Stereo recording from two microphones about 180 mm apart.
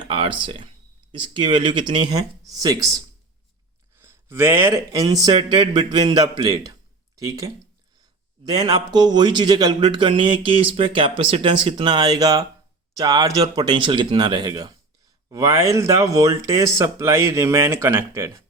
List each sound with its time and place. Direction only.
0.1 s speech: 30° right (ahead or behind)